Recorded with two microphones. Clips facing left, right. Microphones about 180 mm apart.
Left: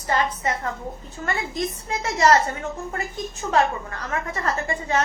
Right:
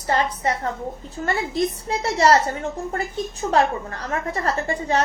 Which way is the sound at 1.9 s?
30° right (ahead or behind).